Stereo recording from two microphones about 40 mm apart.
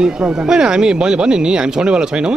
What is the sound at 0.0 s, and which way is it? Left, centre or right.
Speech, centre.